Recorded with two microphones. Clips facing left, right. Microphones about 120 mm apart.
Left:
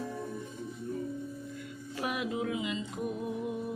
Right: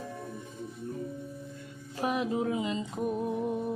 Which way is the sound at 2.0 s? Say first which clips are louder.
Right 4 dB; 35° right (ahead or behind).